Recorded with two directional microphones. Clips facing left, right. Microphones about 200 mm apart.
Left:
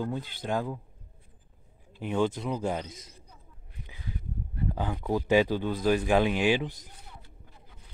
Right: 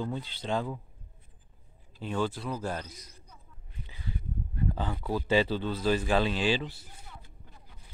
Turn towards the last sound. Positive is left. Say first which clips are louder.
# left 3 dB
turn(degrees=15)  # may be behind; listen again after turning